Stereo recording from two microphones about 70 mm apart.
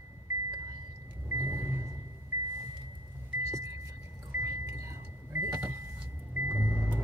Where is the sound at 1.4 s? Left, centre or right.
Right.